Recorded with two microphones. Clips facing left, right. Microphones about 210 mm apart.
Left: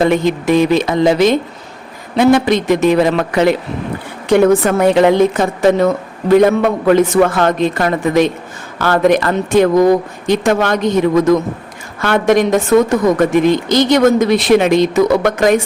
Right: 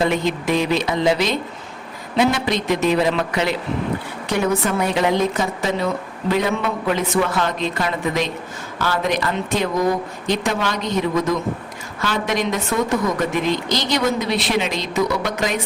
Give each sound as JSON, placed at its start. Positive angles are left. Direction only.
{"t": 0.0, "sound": "a woman's voice", "side_deg": 50}